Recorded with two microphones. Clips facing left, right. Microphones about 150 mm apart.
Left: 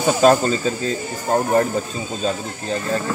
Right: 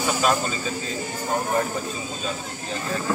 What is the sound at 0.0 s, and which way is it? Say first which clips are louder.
Speech: left 8 dB; 40° left (ahead or behind).